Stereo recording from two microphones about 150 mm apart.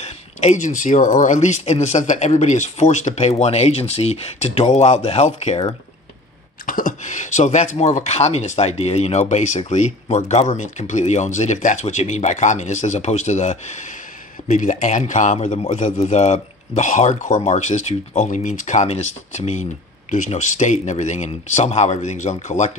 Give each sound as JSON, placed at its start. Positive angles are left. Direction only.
{"t": 0.0, "sound": "speech", "side_deg": 50}
{"t": 6.6, "sound": "speech", "side_deg": 65}